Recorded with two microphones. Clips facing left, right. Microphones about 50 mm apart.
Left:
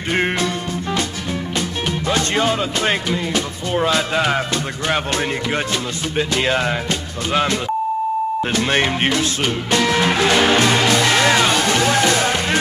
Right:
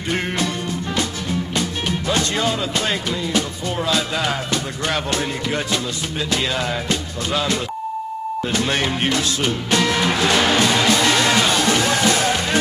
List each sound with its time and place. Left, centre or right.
0.1 s music: left
2.0 s speech: left
6.1 s speech: left
8.6 s speech: left
11.3 s music: centre